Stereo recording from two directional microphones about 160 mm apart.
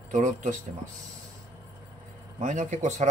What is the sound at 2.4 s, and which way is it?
Speech, 50° right (ahead or behind).